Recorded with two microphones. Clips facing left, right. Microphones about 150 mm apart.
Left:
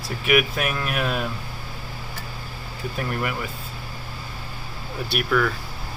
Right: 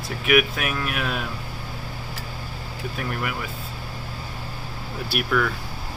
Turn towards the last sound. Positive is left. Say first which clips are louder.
# left 1 dB
turn(degrees=0)  # may be behind; listen again after turning